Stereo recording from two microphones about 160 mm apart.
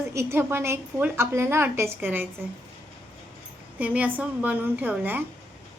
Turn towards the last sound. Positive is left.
turn(degrees=-10)  # may be behind; listen again after turning